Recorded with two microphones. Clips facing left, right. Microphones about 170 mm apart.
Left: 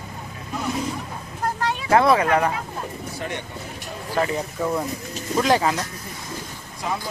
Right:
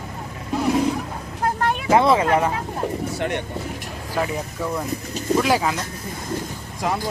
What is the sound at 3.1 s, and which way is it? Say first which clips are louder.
Speech: right 6 dB; 70° right (ahead or behind).